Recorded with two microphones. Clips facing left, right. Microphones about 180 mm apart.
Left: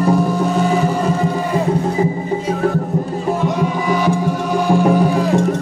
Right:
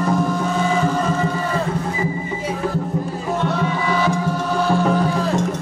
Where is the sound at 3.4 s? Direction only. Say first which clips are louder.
Left 3 dB; 15° left (ahead or behind).